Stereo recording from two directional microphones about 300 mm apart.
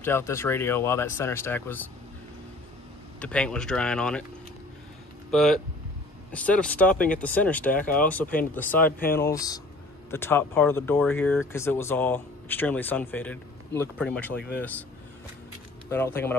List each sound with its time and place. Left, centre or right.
0.0 s speech: centre
3.2 s speech: centre
5.3 s speech: centre
15.9 s speech: centre